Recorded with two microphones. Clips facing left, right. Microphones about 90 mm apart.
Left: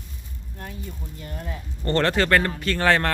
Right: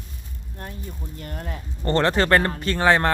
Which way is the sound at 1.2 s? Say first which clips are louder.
Right 1 dB; 50° right (ahead or behind).